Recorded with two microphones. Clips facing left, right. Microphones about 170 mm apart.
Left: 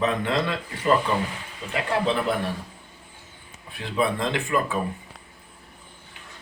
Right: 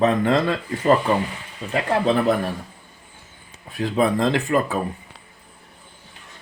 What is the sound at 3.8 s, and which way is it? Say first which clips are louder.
Speech: right 5 dB; 40° right (ahead or behind).